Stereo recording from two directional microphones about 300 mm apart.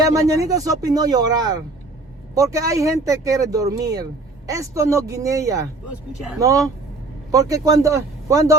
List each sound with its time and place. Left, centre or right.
0.0 s speech: centre